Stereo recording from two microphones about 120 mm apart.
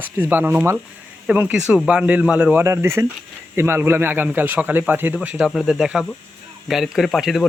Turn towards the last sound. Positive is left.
turn(degrees=0)  # may be behind; listen again after turning